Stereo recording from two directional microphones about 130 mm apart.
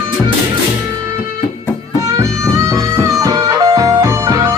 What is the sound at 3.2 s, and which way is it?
Music, 30° right (ahead or behind).